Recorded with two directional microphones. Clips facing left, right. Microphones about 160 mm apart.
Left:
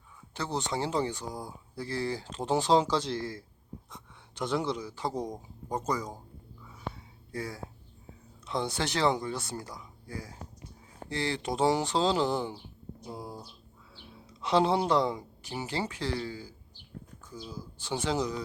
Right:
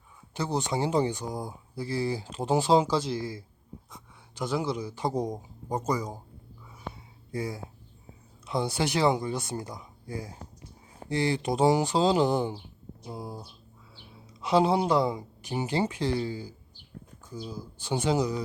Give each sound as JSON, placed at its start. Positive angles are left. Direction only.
{"t": 0.3, "sound": "speech", "side_deg": -15}
{"t": 7.3, "sound": "speech", "side_deg": -15}